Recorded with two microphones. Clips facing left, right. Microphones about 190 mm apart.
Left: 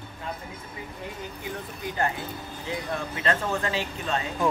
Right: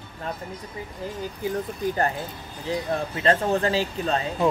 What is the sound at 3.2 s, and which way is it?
Speech, 35° right (ahead or behind).